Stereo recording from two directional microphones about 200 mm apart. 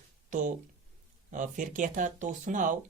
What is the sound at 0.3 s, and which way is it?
Speech, 40° right (ahead or behind).